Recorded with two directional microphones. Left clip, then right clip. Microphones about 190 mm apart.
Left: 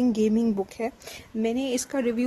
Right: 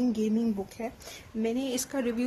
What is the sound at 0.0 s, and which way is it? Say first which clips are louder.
Speech: left 5 dB; 45° left (ahead or behind).